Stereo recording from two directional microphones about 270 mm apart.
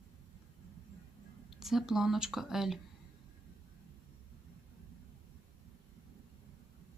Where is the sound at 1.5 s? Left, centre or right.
Centre.